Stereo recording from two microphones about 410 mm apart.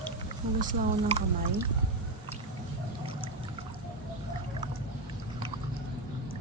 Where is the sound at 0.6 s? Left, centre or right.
Centre.